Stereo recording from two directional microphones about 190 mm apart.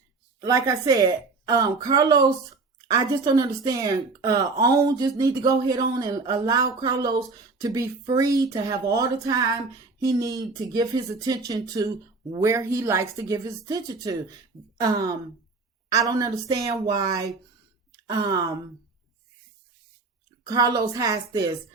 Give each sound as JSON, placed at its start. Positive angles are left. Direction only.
{"t": 0.4, "sound": "speech", "side_deg": -20}
{"t": 20.4, "sound": "speech", "side_deg": -20}